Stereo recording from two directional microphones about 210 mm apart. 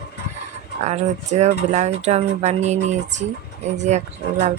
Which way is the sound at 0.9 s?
35° right (ahead or behind).